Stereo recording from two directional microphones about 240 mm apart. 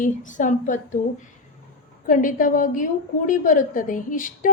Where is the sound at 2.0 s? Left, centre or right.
Left.